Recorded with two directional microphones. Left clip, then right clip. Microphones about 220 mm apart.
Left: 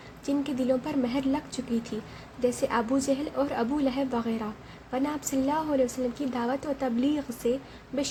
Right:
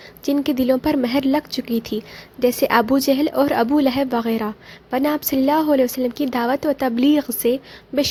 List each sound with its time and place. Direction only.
0.3 s a woman's voice: 40° right (ahead or behind)